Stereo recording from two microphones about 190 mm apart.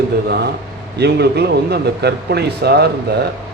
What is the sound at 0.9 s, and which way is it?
Speech, 60° right (ahead or behind).